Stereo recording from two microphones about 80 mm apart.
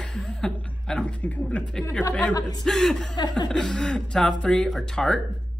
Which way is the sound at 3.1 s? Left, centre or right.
Left.